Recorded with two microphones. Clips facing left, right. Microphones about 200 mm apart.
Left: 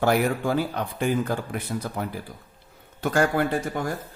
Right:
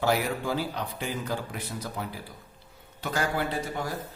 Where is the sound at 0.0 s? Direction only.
55° left (ahead or behind).